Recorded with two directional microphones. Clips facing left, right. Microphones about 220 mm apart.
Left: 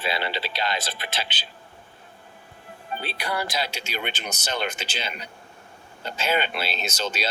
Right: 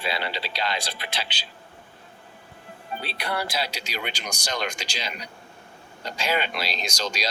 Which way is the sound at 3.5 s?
30° right (ahead or behind).